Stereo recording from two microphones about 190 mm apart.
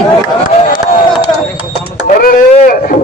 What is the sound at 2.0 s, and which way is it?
Speech, 45° left (ahead or behind).